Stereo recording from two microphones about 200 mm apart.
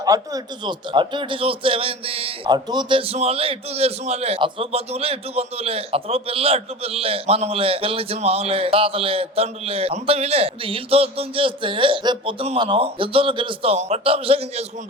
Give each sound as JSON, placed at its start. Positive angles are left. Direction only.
{"t": 0.0, "sound": "speech", "side_deg": -20}